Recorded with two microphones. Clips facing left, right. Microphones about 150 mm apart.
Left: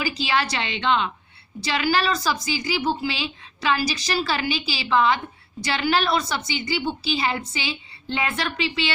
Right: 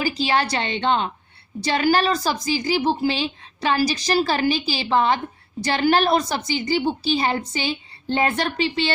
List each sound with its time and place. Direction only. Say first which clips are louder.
0.0 s a woman's voice: right 3 dB; 40° right (ahead or behind)